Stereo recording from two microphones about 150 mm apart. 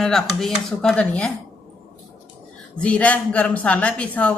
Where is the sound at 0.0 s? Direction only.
5° left (ahead or behind).